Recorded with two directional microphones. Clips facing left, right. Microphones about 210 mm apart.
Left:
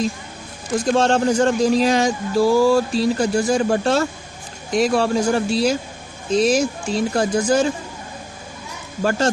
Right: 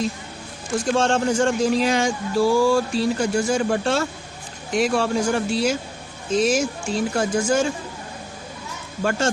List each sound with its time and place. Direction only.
0.9 s speech: 35° left (ahead or behind)
9.0 s speech: 35° left (ahead or behind)